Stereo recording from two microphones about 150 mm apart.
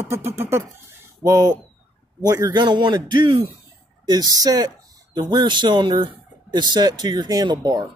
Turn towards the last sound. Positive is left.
turn(degrees=-30)  # may be behind; listen again after turning